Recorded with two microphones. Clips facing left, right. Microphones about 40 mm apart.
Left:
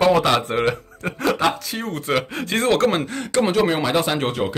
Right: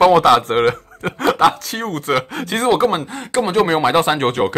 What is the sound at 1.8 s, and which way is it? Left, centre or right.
Speech, right.